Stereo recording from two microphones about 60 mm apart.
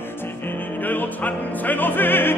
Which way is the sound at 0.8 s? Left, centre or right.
Left.